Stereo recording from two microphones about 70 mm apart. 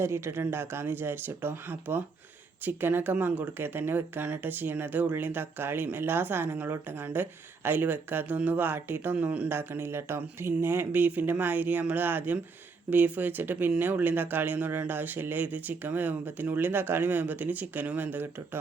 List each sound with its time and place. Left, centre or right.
0.0 s speech: right
9.5 s speech: right